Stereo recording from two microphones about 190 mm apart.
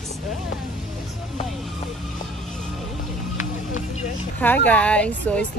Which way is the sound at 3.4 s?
40° left (ahead or behind).